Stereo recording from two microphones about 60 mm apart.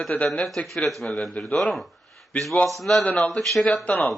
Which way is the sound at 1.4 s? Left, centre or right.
Left.